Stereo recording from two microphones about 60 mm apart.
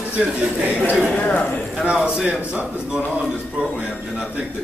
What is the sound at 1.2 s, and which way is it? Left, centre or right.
Speech, left.